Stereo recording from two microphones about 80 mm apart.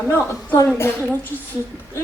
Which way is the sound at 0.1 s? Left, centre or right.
Left.